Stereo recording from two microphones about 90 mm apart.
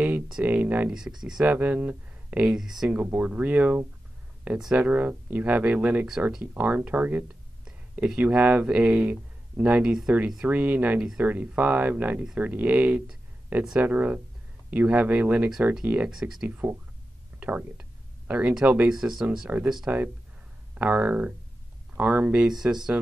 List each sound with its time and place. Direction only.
0.3 s speech: 15° right (ahead or behind)
0.9 s speech: 5° right (ahead or behind)
3.0 s speech: 20° right (ahead or behind)
16.4 s speech: 20° right (ahead or behind)
19.5 s speech: 20° right (ahead or behind)